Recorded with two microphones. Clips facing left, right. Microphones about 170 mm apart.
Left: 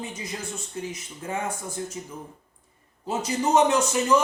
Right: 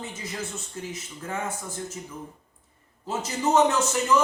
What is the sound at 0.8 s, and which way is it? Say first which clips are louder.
Speech: left 1 dB; 20° left (ahead or behind).